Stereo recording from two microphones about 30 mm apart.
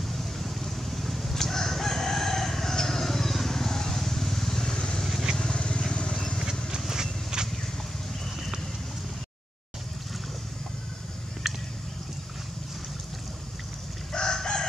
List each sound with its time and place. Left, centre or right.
0.2 s vehicle: centre
1.3 s crowing: centre
3.0 s vehicle: centre
4.6 s vehicle: left
6.1 s vehicle: centre
6.9 s a sound: right
11.4 s a sound: centre
14.1 s chicken: centre